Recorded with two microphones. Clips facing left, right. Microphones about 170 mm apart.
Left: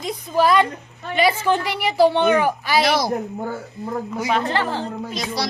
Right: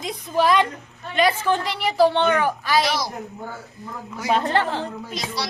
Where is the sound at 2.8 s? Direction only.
60° left (ahead or behind).